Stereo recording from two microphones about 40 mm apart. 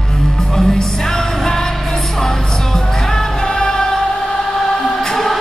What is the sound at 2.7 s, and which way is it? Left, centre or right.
Music, centre.